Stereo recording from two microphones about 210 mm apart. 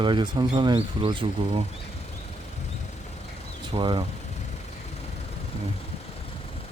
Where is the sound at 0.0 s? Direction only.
20° right (ahead or behind).